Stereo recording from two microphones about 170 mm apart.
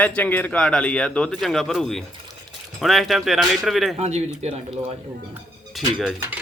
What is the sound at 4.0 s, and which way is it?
Speech, 40° right (ahead or behind).